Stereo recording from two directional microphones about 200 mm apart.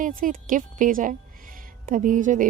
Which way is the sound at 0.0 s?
45° right (ahead or behind).